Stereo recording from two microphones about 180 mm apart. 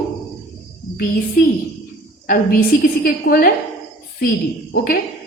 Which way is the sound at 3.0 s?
50° left (ahead or behind).